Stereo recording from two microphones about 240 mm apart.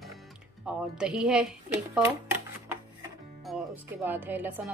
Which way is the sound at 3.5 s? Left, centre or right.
Centre.